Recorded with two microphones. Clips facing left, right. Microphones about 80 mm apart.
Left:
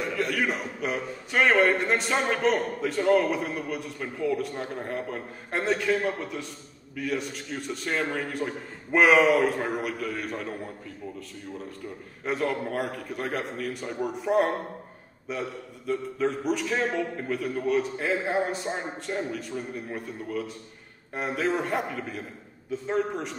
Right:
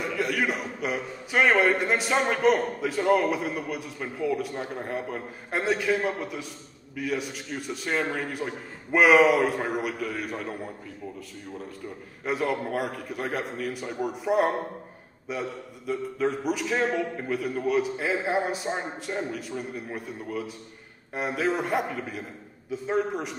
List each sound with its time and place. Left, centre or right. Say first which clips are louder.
0.0 s a man's voice: even; centre
12.3 s a man's voice: right 1 dB; centre